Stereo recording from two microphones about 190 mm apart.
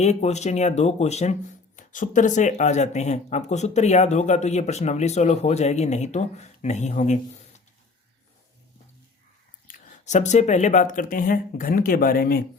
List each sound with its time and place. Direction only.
0.0 s speech: 35° left (ahead or behind)
9.6 s speech: 40° left (ahead or behind)